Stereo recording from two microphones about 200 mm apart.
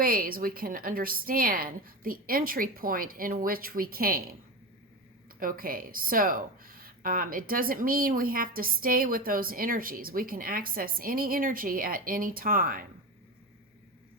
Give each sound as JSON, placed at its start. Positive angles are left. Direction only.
{"t": 0.0, "sound": "speech", "side_deg": -45}
{"t": 5.4, "sound": "speech", "side_deg": -45}